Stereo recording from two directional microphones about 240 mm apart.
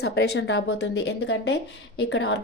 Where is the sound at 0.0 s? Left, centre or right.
Left.